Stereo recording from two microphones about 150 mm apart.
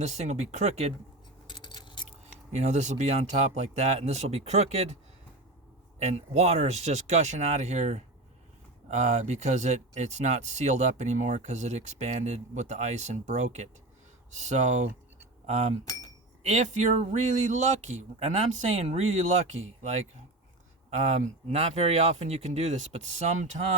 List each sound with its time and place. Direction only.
0.0 s speech: 50° right (ahead or behind)
1.5 s a sound: 30° left (ahead or behind)
2.5 s speech: 50° right (ahead or behind)
6.0 s speech: 50° right (ahead or behind)
20.9 s speech: 50° right (ahead or behind)